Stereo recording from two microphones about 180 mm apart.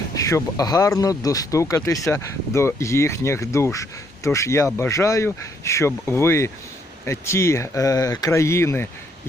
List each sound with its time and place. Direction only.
0.1 s speech: 20° left (ahead or behind)